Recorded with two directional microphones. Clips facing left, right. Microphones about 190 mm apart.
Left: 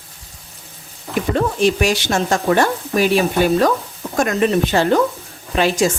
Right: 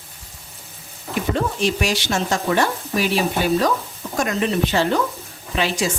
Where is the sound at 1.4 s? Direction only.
55° left (ahead or behind).